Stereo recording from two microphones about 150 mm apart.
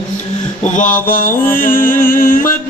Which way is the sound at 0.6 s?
55° left (ahead or behind).